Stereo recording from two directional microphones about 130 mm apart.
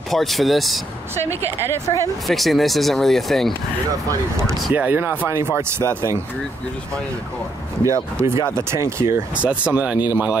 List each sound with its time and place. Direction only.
0.1 s speech: centre (ahead or behind)
1.9 s speech: 35° left (ahead or behind)
2.2 s speech: centre (ahead or behind)
4.7 s speech: 15° right (ahead or behind)
7.8 s speech: 25° right (ahead or behind)
9.4 s speech: 10° right (ahead or behind)